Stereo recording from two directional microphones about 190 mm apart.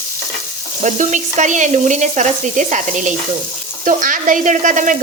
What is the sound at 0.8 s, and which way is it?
Stir, 40° right (ahead or behind).